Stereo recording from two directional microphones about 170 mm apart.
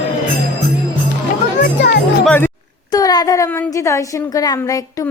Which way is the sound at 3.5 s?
15° left (ahead or behind).